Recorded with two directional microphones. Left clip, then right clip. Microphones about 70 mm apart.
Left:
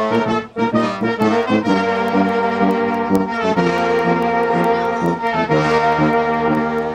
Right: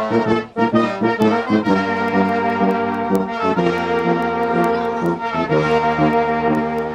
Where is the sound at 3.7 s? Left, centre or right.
Left.